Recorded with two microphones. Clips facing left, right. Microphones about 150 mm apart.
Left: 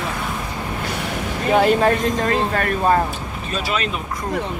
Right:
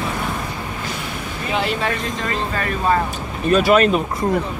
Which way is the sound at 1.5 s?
45° left (ahead or behind).